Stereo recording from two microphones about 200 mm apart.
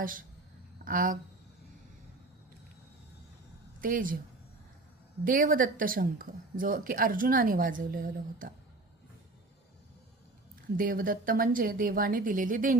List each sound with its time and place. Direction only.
0.0 s speech: 45° right (ahead or behind)
3.8 s speech: 45° right (ahead or behind)
5.2 s speech: 45° right (ahead or behind)
10.8 s speech: 45° right (ahead or behind)